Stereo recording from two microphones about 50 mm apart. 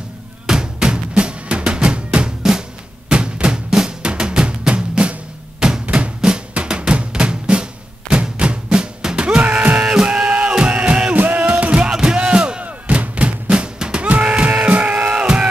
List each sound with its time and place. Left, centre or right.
0.5 s music: centre
3.1 s drum: centre
9.8 s music: centre
11.1 s music: right
11.6 s music: centre